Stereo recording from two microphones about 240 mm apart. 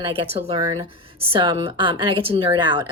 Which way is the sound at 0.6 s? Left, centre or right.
Centre.